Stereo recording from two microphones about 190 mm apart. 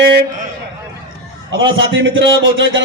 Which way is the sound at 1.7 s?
75° right (ahead or behind).